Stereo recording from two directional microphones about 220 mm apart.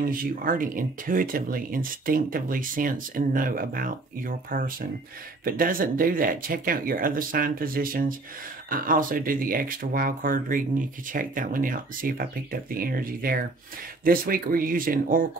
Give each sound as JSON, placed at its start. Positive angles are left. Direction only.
{"t": 0.0, "sound": "speech", "side_deg": -40}